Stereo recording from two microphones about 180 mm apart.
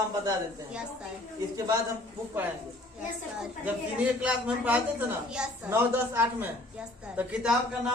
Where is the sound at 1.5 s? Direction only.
20° right (ahead or behind).